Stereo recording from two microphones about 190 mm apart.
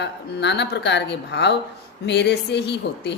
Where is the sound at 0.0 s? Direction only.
65° left (ahead or behind).